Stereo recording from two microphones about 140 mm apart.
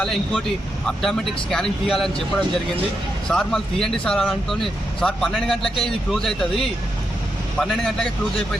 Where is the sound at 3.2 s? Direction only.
5° left (ahead or behind).